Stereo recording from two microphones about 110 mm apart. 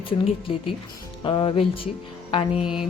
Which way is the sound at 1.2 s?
50° left (ahead or behind).